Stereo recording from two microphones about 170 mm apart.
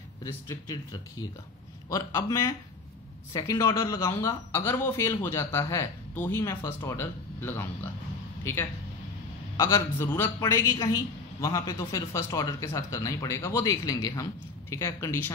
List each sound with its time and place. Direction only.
0.9 s a man's voice: 25° left (ahead or behind)
9.6 s speech: 15° left (ahead or behind)